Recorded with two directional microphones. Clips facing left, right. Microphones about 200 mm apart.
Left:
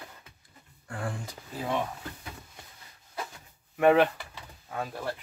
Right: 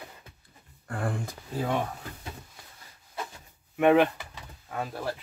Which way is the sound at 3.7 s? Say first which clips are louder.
Right 1 dB; centre (ahead or behind).